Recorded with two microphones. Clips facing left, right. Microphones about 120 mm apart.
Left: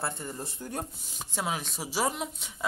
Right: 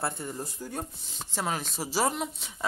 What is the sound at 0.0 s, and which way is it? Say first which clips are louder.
A woman's voice: right 2 dB; 5° right (ahead or behind).